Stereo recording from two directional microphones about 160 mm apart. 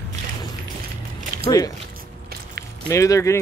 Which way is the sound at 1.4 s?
20° left (ahead or behind).